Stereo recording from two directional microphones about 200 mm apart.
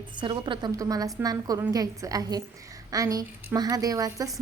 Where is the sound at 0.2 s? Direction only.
25° right (ahead or behind).